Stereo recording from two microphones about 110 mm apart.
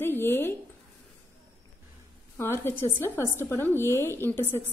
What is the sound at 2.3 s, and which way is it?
A woman's voice, 20° left (ahead or behind).